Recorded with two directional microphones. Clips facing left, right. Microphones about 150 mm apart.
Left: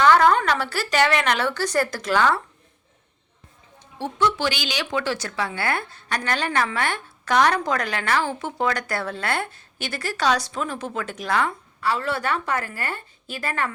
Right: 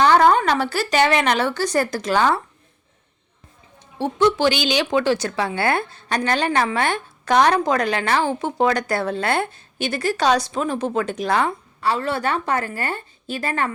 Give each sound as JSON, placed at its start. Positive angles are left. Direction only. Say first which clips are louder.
{"t": 0.0, "sound": "a sound", "louder": "right 2 dB", "side_deg": -30}
{"t": 0.3, "sound": "speech", "louder": "right 3 dB", "side_deg": -20}
{"t": 3.9, "sound": "speech", "louder": "right 5 dB", "side_deg": -20}